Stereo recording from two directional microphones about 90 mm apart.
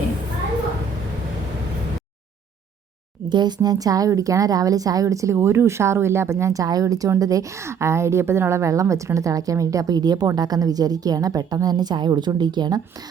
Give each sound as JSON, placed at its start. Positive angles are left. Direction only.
{"t": 3.2, "sound": "a woman's voice", "side_deg": -55}